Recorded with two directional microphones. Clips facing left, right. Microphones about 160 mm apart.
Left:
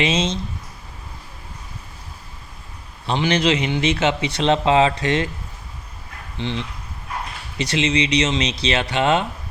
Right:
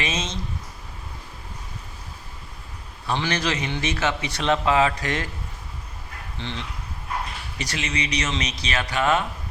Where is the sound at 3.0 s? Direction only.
20° left (ahead or behind).